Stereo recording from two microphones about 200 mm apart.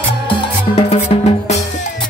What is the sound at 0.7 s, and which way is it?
Music, 30° left (ahead or behind).